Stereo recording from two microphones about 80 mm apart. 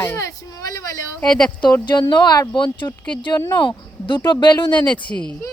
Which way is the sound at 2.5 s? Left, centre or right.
Left.